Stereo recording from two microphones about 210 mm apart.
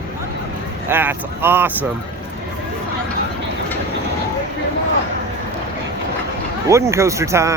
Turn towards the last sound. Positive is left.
turn(degrees=-15)  # may be behind; listen again after turning